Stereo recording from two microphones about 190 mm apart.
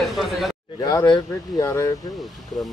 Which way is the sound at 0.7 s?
20° left (ahead or behind).